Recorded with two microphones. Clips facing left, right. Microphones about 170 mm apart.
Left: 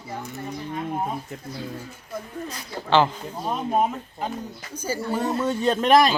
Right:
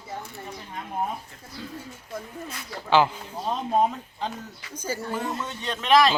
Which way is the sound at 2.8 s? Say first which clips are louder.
Left 1 dB; 10° right (ahead or behind).